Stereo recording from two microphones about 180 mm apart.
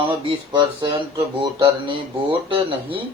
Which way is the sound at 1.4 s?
30° right (ahead or behind).